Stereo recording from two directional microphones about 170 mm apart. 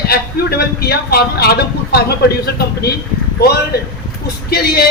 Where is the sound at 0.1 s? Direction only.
65° left (ahead or behind).